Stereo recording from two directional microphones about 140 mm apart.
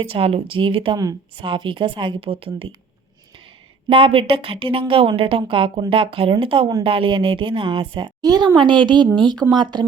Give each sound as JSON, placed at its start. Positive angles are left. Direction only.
{"t": 0.0, "sound": "a woman's voice", "side_deg": -45}
{"t": 3.8, "sound": "a woman's voice", "side_deg": -40}